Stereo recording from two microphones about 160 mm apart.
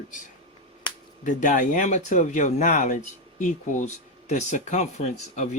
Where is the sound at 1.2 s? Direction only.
50° left (ahead or behind).